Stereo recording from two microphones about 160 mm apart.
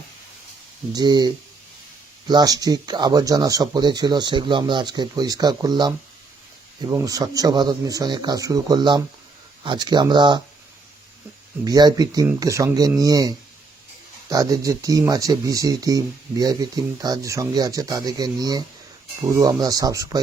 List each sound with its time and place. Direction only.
0.9 s speech: 25° right (ahead or behind)
11.6 s speech: 25° right (ahead or behind)